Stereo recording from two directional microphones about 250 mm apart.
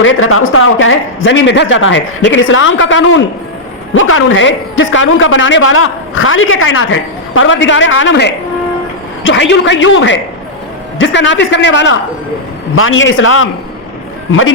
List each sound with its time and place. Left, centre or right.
0.0 s a man's voice: left